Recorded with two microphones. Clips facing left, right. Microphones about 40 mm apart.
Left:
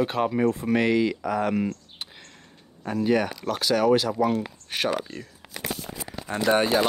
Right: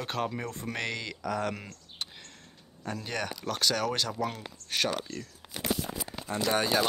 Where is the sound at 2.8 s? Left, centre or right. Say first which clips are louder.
Left 11 dB; centre.